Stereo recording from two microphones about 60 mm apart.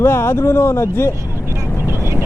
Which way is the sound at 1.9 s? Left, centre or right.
Right.